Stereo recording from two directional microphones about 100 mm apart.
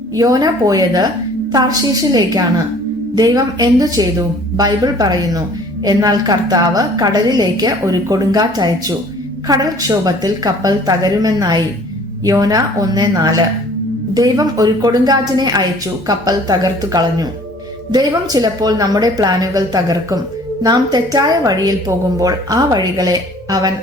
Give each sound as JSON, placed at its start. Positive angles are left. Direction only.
{"t": 0.2, "sound": "a woman's voice", "side_deg": -40}
{"t": 3.2, "sound": "a woman's voice", "side_deg": -40}